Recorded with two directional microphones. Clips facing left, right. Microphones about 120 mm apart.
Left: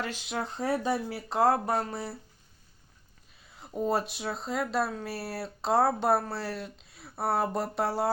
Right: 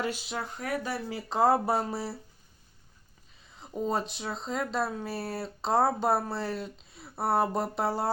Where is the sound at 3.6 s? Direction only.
5° left (ahead or behind).